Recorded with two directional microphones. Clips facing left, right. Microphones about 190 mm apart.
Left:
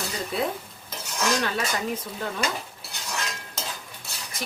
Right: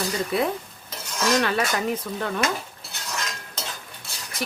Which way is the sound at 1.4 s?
65° right (ahead or behind).